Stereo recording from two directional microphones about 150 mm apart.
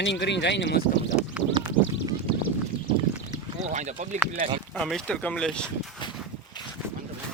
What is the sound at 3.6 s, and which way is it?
Speech, 50° right (ahead or behind).